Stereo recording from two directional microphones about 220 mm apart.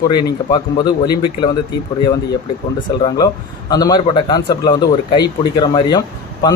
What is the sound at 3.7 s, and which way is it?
Speech, 15° left (ahead or behind).